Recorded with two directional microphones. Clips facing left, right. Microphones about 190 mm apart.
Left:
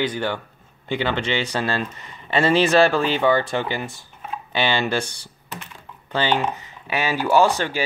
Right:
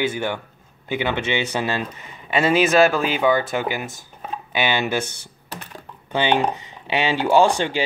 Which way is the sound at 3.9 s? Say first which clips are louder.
Right 1 dB; 35° right (ahead or behind).